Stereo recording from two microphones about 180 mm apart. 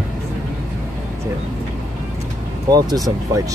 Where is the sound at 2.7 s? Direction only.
20° right (ahead or behind).